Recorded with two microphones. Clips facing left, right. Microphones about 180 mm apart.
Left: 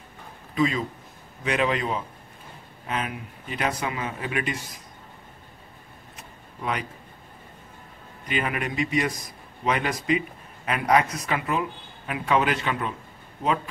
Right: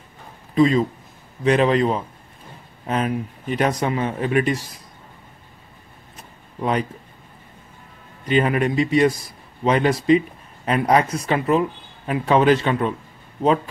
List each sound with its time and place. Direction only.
0.6 s a man's voice: 35° right (ahead or behind)
6.6 s a man's voice: 35° right (ahead or behind)
8.3 s a man's voice: 30° right (ahead or behind)